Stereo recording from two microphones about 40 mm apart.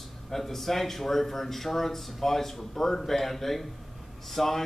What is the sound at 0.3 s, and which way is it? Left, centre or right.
A man's voice, centre.